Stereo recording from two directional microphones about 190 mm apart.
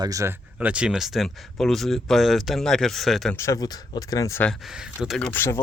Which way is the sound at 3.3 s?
15° left (ahead or behind).